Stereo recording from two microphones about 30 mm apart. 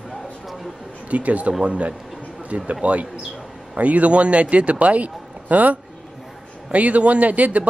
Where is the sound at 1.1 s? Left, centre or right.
Right.